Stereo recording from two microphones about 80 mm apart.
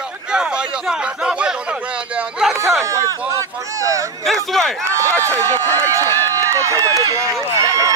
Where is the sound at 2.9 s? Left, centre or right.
Right.